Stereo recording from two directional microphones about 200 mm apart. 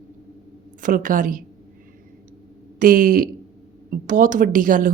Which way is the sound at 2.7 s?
45° right (ahead or behind).